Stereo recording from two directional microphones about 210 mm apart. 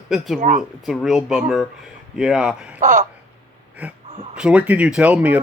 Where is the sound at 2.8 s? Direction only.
40° right (ahead or behind).